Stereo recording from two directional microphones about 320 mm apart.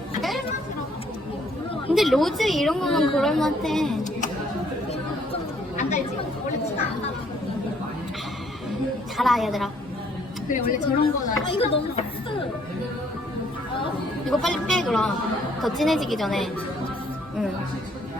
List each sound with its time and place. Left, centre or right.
2.0 s a woman's voice: centre
5.3 s chatter: left
9.1 s a woman's voice: centre
10.5 s speech: left
14.3 s a woman's voice: centre